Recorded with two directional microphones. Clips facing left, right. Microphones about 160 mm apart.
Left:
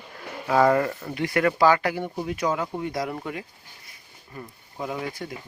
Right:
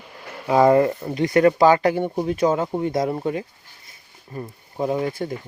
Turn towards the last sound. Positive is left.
turn(degrees=-30)  # may be behind; listen again after turning